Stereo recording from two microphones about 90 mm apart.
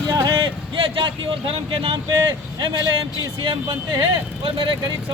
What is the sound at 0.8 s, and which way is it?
A man's voice, 80° right.